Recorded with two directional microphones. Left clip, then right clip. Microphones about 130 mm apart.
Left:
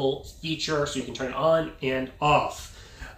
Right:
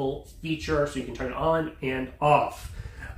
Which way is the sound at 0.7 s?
Centre (ahead or behind).